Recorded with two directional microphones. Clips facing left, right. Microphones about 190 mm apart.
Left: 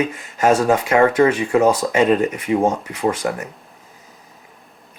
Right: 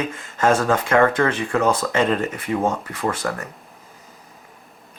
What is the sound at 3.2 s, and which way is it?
Speech, 25° left (ahead or behind).